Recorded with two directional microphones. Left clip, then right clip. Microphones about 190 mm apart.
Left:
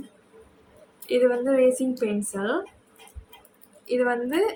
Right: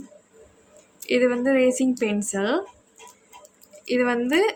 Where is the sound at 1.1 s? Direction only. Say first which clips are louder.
Right 1 dB; 45° right (ahead or behind).